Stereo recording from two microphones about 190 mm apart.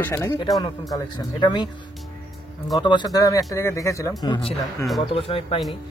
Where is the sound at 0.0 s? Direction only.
15° left (ahead or behind).